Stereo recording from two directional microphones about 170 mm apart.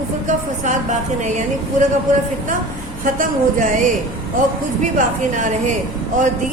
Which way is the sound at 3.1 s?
50° right (ahead or behind).